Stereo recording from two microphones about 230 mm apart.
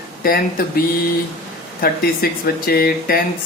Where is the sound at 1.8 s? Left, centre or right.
Left.